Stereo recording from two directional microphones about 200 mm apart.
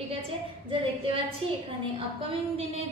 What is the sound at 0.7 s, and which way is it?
A woman's voice, 25° right (ahead or behind).